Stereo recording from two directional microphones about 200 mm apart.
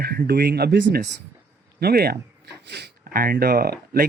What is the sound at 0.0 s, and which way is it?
Speech, 50° right (ahead or behind).